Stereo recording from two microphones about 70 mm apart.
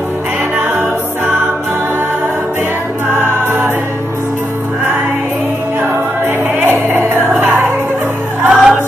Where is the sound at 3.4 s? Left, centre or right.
Right.